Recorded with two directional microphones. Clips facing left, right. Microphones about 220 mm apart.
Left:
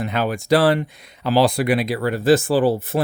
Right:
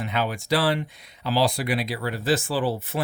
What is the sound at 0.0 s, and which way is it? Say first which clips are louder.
Speech: left 5 dB; 45° left (ahead or behind).